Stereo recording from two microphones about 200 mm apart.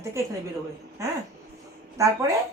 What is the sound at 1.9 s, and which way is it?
Speech, 15° right (ahead or behind).